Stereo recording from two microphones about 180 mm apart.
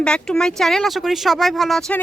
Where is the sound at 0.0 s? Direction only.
5° left (ahead or behind).